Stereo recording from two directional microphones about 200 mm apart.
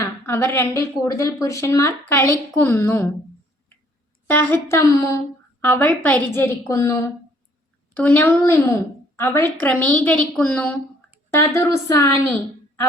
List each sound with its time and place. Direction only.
0.0 s a woman's voice: 15° left (ahead or behind)
4.3 s a woman's voice: 10° left (ahead or behind)
12.3 s a sound: 10° left (ahead or behind)